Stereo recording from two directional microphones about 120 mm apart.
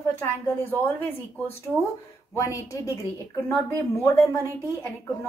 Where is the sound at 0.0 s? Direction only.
20° left (ahead or behind).